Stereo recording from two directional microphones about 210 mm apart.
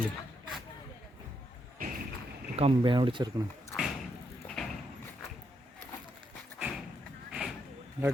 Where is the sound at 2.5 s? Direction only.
25° right (ahead or behind).